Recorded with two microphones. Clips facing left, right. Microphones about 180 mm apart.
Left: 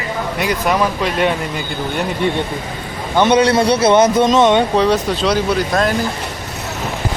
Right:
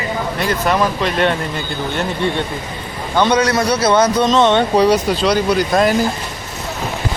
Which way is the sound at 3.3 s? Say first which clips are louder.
Left 3 dB; 30° left (ahead or behind).